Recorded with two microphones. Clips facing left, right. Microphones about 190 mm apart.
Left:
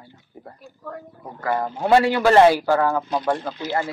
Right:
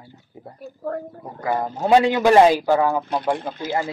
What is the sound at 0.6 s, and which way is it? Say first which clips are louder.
Speech: right 9 dB; 60° right (ahead or behind).